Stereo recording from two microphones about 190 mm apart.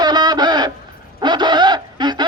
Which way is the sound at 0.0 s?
20° right (ahead or behind).